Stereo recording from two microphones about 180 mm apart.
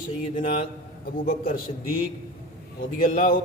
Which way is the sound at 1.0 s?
55° left (ahead or behind).